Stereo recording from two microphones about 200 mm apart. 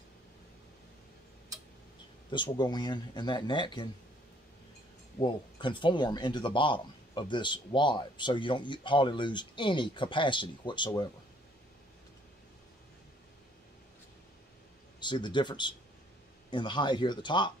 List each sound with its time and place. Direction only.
2.3 s speech: 20° left (ahead or behind)
5.2 s speech: 25° left (ahead or behind)
15.0 s speech: 20° left (ahead or behind)